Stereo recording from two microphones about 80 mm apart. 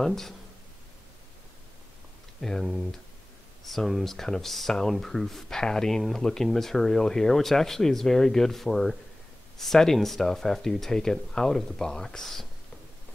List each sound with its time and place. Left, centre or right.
0.0 s speech: centre
2.6 s speech: centre